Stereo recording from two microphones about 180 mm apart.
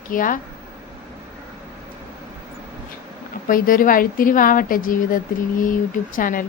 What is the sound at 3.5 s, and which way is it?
A woman's voice, 50° left (ahead or behind).